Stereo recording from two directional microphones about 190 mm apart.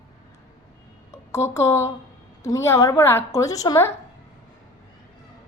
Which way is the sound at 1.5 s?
15° left (ahead or behind).